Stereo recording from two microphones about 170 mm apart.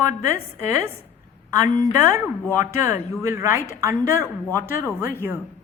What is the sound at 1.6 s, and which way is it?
A woman's voice, 15° right (ahead or behind).